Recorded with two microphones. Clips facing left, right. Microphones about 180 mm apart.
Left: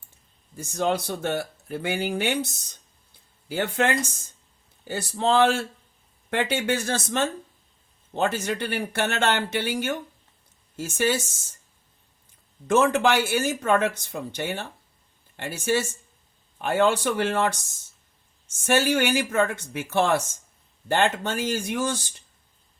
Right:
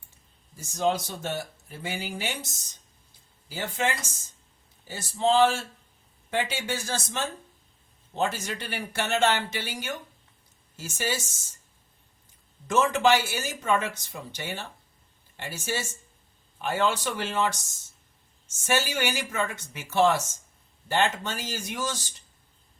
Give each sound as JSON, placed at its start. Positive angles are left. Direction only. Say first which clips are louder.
{"t": 0.5, "sound": "speech", "louder": "left 1 dB", "side_deg": 60}
{"t": 12.6, "sound": "speech", "louder": "left 2 dB", "side_deg": 55}
{"t": 18.6, "sound": "speech", "louder": "left 6 dB", "side_deg": 55}